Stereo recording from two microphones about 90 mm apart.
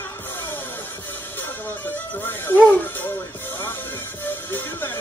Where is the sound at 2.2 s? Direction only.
25° left (ahead or behind).